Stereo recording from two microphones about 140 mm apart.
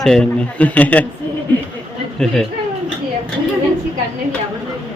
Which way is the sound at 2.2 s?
5° left (ahead or behind).